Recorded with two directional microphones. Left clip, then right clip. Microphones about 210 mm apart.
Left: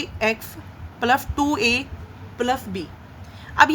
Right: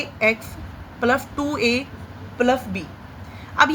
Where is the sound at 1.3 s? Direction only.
50° left (ahead or behind).